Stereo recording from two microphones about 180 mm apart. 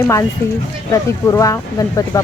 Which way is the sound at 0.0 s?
15° left (ahead or behind).